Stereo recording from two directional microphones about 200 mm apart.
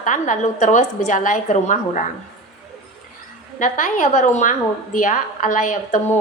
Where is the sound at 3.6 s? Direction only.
40° left (ahead or behind).